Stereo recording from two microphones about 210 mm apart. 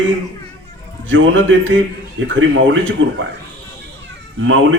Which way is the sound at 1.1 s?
65° right (ahead or behind).